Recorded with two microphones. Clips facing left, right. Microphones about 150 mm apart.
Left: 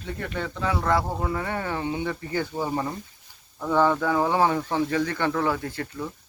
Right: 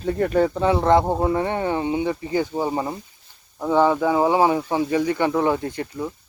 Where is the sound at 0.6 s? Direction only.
25° right (ahead or behind).